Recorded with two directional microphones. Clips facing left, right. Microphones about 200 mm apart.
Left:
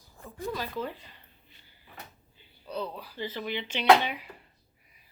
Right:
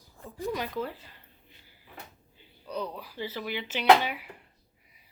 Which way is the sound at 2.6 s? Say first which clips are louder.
Even; 10° right (ahead or behind).